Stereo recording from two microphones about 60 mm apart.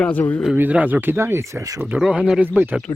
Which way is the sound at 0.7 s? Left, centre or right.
Right.